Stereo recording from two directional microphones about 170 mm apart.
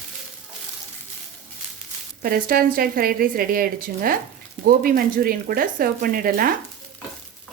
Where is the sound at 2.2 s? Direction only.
60° right (ahead or behind).